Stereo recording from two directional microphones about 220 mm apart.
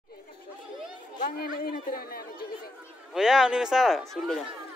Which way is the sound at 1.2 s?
40° left (ahead or behind).